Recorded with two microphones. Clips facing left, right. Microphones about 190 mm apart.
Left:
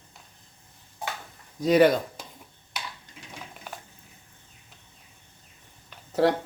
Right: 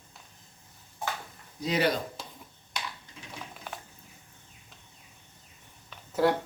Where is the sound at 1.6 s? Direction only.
50° left (ahead or behind).